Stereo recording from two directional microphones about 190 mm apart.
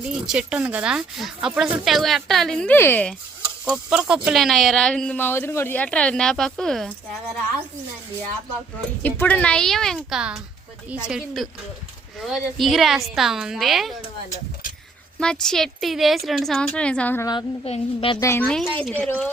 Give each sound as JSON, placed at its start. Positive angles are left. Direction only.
{"t": 0.1, "sound": "speech", "side_deg": -5}
{"t": 3.7, "sound": "speech", "side_deg": -5}
{"t": 9.0, "sound": "speech", "side_deg": 10}
{"t": 15.2, "sound": "speech", "side_deg": 5}
{"t": 17.2, "sound": "a woman's voice", "side_deg": 25}
{"t": 18.2, "sound": "a woman's voice", "side_deg": 15}
{"t": 18.4, "sound": "a woman's voice", "side_deg": 5}